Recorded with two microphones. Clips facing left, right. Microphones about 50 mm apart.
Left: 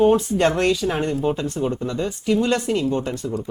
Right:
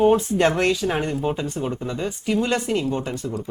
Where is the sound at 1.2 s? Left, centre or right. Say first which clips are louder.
Left 2 dB; centre.